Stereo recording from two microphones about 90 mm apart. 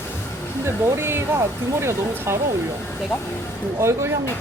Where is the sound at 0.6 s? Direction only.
25° right (ahead or behind).